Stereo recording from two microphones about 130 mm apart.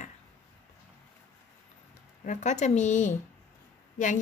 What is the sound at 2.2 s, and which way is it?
Speech, 70° left (ahead or behind).